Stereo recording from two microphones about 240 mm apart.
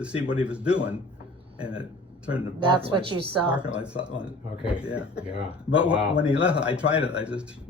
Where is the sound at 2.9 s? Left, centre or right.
Centre.